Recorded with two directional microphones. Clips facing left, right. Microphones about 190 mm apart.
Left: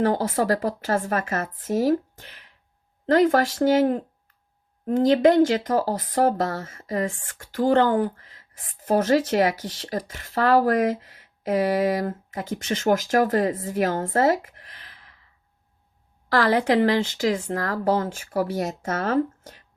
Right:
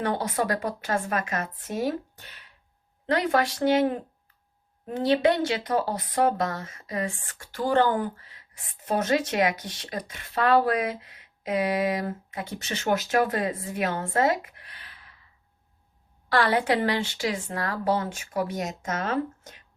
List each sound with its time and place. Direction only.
0.0 s speech: 40° left (ahead or behind)
3.1 s speech: 45° left (ahead or behind)
16.3 s speech: 40° left (ahead or behind)